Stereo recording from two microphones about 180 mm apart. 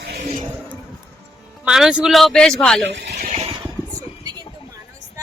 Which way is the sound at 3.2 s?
45° right (ahead or behind).